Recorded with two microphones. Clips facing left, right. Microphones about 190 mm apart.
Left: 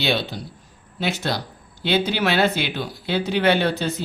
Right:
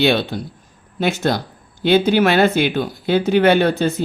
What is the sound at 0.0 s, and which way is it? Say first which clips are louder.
A man's voice: right 7 dB; 55° right (ahead or behind).